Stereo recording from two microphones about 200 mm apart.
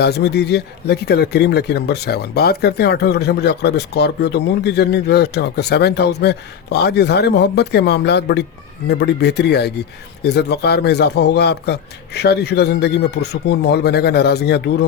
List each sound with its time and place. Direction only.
0.0 s speech: 55° left (ahead or behind)